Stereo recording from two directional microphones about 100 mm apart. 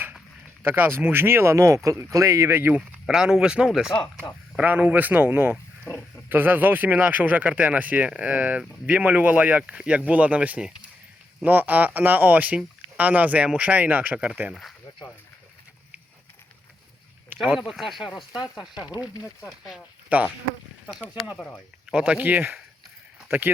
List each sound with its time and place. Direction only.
0.6 s speech: 20° right (ahead or behind)
3.1 s speech: 5° right (ahead or behind)
17.3 s a sound: 20° right (ahead or behind)
17.7 s speech: centre (ahead or behind)
20.9 s speech: 10° left (ahead or behind)
21.8 s speech: 10° right (ahead or behind)